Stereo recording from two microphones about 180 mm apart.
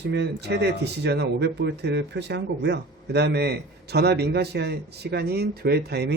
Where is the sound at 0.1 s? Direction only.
70° right (ahead or behind).